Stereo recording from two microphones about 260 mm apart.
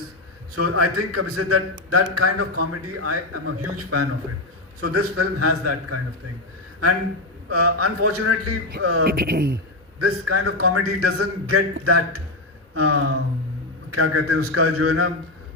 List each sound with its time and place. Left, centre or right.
0.5 s a man's voice: right
7.5 s a man's voice: right
9.0 s speech: right
10.0 s a man's voice: right